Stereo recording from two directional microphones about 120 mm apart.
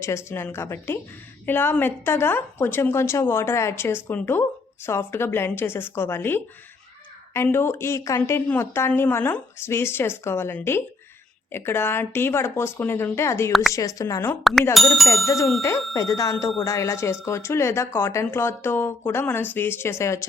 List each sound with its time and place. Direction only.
0.0 s a woman's voice: 20° left (ahead or behind)
7.4 s a woman's voice: 20° left (ahead or behind)
14.7 s speech: centre (ahead or behind)
16.0 s a woman's voice: 30° left (ahead or behind)